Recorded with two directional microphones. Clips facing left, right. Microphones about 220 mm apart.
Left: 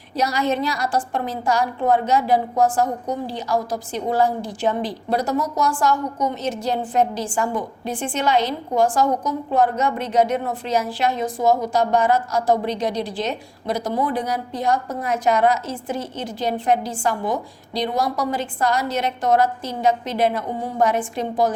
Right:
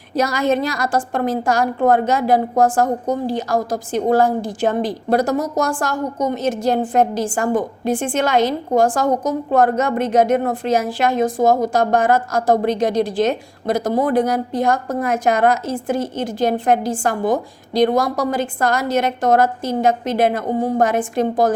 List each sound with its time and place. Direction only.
0.2 s a woman's voice: 50° right (ahead or behind)